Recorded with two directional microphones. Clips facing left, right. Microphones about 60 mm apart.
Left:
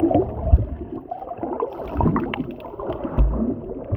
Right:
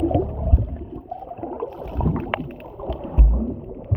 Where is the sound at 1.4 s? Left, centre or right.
Left.